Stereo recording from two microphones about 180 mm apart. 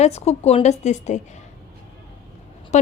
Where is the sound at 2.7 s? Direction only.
40° left (ahead or behind).